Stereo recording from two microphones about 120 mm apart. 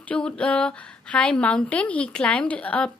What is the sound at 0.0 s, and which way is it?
A woman's voice, 10° left (ahead or behind).